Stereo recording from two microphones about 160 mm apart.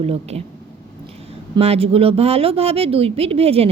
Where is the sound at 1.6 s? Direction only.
40° right (ahead or behind).